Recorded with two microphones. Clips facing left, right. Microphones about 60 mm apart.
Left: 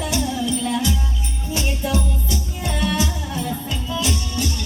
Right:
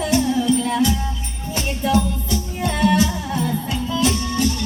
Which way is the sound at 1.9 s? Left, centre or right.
Right.